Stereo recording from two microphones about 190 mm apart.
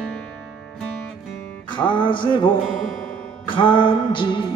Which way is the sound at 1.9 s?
25° left (ahead or behind).